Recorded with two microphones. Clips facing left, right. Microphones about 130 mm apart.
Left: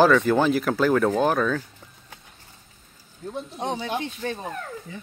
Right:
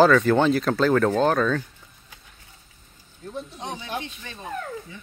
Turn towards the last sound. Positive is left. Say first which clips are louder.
# left 10 dB
turn(degrees=45)  # may be behind; listen again after turning